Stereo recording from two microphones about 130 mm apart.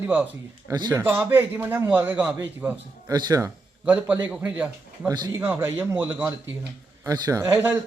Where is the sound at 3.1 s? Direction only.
25° right (ahead or behind).